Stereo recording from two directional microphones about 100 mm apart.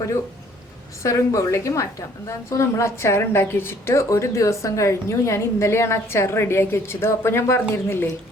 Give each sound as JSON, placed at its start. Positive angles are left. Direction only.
{"t": 1.0, "sound": "a woman's voice", "side_deg": 35}